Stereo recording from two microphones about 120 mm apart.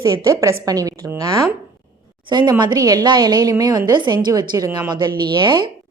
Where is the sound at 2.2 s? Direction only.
40° right (ahead or behind).